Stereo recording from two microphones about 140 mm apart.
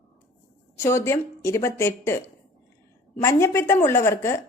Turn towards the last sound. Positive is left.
turn(degrees=20)  # may be behind; listen again after turning